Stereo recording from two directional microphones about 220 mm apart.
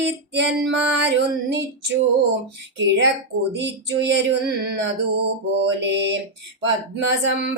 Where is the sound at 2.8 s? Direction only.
55° right (ahead or behind).